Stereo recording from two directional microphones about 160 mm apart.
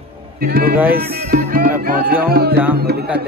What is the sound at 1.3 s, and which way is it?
Speech, 65° right (ahead or behind).